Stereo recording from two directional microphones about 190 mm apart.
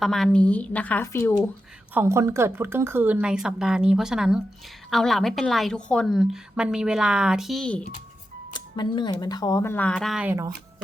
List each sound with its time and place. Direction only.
0.0 s speech: centre (ahead or behind)
1.9 s a woman's voice: 10° right (ahead or behind); by 7.9 s 5° left (ahead or behind)
8.5 s speech: 25° left (ahead or behind); by 10.4 s 5° right (ahead or behind)